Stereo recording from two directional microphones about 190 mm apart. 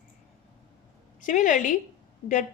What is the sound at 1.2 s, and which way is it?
Speech, 40° left (ahead or behind).